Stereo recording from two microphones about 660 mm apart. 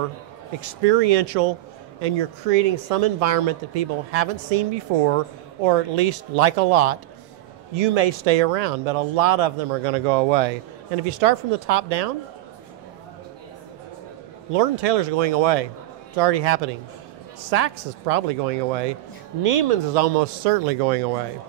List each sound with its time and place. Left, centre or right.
0.6 s speech: right
14.5 s speech: right